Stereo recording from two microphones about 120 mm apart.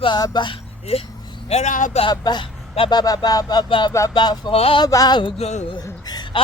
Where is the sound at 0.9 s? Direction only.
60° left (ahead or behind).